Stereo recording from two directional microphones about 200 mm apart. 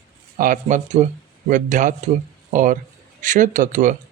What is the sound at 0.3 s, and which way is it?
Speech, 40° right (ahead or behind).